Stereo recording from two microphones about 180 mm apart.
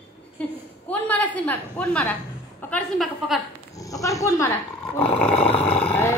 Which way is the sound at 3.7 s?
20° left (ahead or behind).